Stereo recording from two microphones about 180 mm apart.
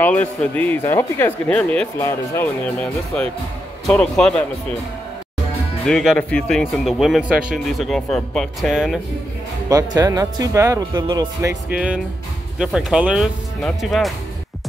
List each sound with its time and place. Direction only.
0.0 s speech: 5° left (ahead or behind)
5.9 s speech: centre (ahead or behind)
9.7 s speech: 20° right (ahead or behind)
11.7 s speech: 5° right (ahead or behind)